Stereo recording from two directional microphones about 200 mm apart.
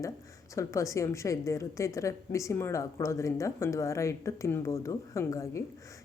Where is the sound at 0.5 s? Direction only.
15° left (ahead or behind).